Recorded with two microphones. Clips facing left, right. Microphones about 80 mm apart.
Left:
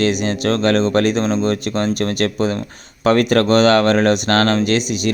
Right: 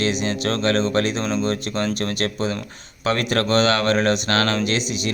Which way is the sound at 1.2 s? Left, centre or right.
Left.